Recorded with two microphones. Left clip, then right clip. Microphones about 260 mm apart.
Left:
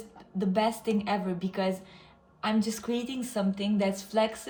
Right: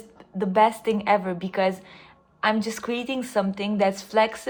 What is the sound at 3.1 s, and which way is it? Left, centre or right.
Speech, centre.